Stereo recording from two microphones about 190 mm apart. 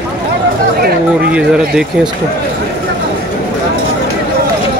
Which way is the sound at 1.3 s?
5° right (ahead or behind).